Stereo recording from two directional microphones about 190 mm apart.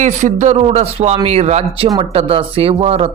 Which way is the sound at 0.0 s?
40° right (ahead or behind).